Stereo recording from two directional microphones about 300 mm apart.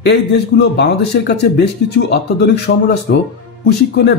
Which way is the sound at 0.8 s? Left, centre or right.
Left.